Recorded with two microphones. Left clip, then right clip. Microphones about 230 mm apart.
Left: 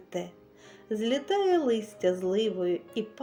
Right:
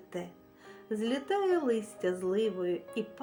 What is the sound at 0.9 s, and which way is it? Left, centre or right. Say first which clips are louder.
Speech: left 4 dB; right.